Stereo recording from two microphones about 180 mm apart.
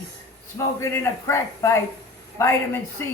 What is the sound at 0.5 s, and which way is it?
A man's voice, 15° left (ahead or behind).